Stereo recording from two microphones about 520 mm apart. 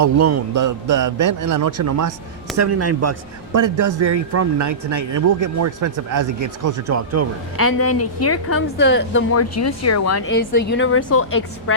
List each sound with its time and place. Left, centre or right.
0.0 s a man's voice: right
7.5 s a woman's voice: left